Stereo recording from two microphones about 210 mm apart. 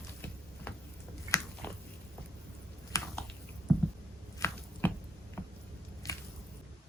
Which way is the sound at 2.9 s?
15° left (ahead or behind).